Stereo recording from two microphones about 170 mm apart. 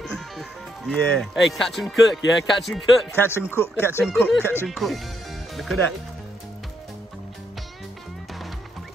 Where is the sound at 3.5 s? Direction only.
15° left (ahead or behind).